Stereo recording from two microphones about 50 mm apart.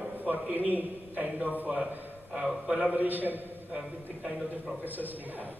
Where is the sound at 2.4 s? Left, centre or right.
Centre.